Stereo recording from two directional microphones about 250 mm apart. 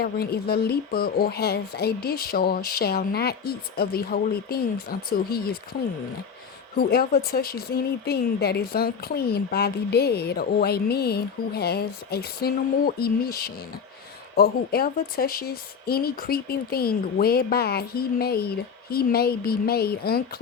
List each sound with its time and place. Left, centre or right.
0.0 s speech: left
6.7 s speech: left